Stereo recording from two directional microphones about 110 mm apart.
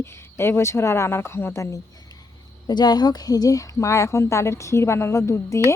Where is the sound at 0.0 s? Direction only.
25° left (ahead or behind).